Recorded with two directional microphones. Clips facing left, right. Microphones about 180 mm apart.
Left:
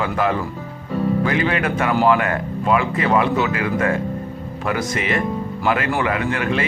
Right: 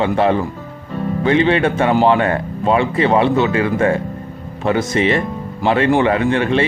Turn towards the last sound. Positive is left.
turn(degrees=-30)  # may be behind; listen again after turning